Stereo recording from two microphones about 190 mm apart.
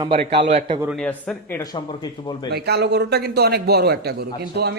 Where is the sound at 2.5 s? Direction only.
60° right (ahead or behind).